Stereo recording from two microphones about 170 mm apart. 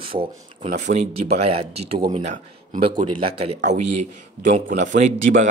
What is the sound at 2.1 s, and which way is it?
Speech, 45° right (ahead or behind).